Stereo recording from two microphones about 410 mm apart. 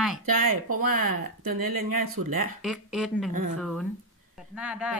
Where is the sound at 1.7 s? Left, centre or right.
Right.